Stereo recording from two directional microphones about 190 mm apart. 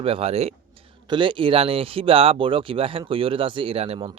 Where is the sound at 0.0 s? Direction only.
30° right (ahead or behind).